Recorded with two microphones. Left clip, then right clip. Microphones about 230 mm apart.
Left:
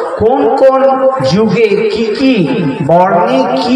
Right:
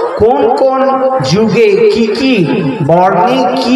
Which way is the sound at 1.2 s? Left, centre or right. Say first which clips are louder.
Right 1 dB; right.